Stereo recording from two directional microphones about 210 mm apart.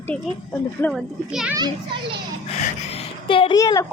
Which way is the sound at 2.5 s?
35° left (ahead or behind).